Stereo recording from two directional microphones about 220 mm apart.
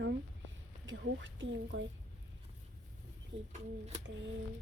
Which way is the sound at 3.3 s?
55° right (ahead or behind).